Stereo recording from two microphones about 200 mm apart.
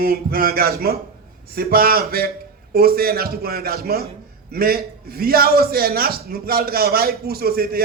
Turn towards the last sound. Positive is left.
turn(degrees=-50)  # may be behind; listen again after turning